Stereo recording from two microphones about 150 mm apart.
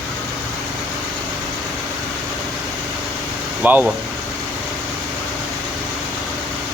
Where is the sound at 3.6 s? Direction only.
10° right (ahead or behind).